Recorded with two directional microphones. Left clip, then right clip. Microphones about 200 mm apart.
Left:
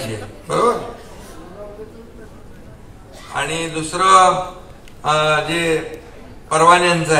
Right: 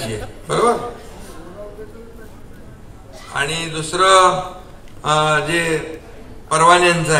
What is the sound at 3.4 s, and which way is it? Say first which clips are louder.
A man's voice: even; 30° right (ahead or behind).